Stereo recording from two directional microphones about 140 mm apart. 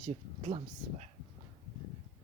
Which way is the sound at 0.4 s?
50° right (ahead or behind).